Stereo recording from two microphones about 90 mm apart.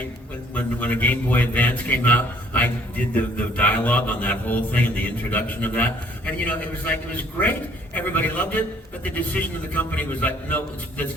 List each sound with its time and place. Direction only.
0.5 s a man's voice: 20° left (ahead or behind)
3.2 s mantra: 15° left (ahead or behind)
7.9 s a man's voice: 20° left (ahead or behind)